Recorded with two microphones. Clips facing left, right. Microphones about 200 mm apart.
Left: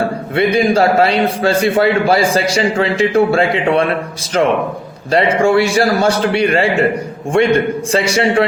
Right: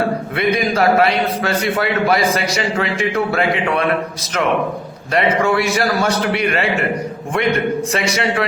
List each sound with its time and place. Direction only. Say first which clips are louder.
0.3 s a man's voice: left 6 dB; 30° left (ahead or behind)
7.9 s a man's voice: left 5 dB; 30° left (ahead or behind)